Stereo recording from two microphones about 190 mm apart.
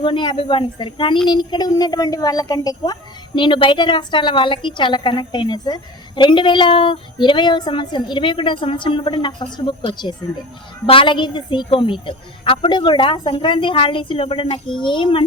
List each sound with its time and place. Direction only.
0.0 s a child's voice: 25° left (ahead or behind)